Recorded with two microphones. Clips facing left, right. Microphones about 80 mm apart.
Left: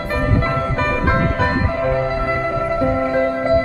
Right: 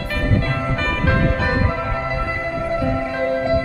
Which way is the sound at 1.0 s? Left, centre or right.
Left.